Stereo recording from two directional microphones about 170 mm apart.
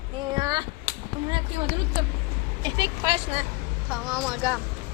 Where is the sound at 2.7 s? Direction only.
25° right (ahead or behind).